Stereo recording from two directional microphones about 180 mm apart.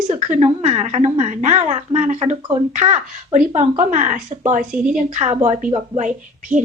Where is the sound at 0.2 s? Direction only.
40° right (ahead or behind).